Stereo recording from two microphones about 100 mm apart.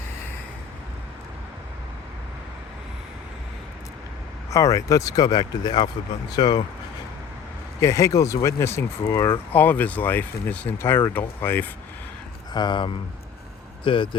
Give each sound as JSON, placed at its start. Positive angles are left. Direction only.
{"t": 4.5, "sound": "speech", "side_deg": 35}
{"t": 7.8, "sound": "speech", "side_deg": 30}
{"t": 9.5, "sound": "speech", "side_deg": 20}
{"t": 12.5, "sound": "speech", "side_deg": 50}